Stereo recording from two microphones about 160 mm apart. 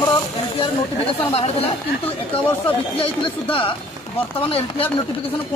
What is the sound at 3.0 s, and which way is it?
Speech, 35° left (ahead or behind).